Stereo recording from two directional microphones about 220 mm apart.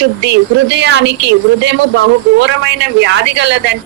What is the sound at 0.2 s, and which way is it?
Speech, 50° right (ahead or behind).